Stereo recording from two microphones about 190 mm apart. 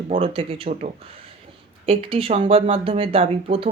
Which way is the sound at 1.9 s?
30° right (ahead or behind).